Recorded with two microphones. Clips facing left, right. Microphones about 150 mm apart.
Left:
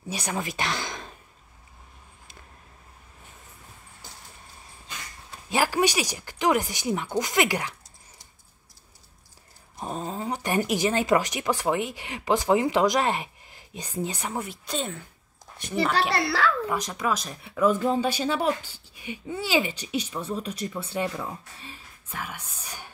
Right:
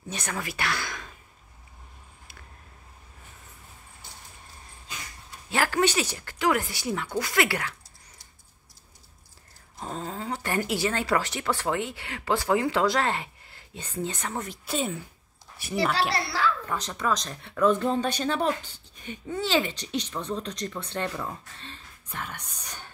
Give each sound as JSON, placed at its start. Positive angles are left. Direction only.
{"t": 0.1, "sound": "speech", "side_deg": 15}
{"t": 5.5, "sound": "speech", "side_deg": 15}
{"t": 9.8, "sound": "speech", "side_deg": 15}
{"t": 14.7, "sound": "a woman's voice", "side_deg": -5}
{"t": 16.1, "sound": "a woman's voice", "side_deg": 65}
{"t": 16.6, "sound": "speech", "side_deg": 10}